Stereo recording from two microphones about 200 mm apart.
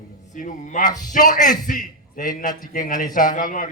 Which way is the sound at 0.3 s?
40° left (ahead or behind).